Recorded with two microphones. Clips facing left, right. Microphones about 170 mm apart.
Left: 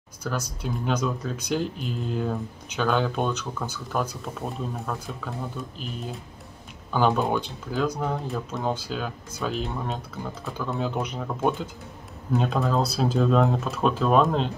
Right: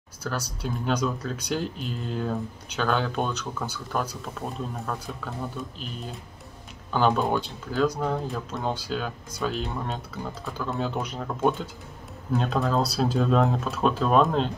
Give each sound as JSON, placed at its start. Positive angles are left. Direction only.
{"t": 0.7, "sound": "speech", "side_deg": 0}
{"t": 3.5, "sound": "speech", "side_deg": -10}
{"t": 3.9, "sound": "speech", "side_deg": 5}